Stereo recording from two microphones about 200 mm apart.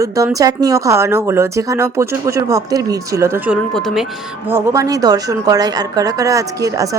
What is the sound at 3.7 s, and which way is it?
Speech, centre (ahead or behind).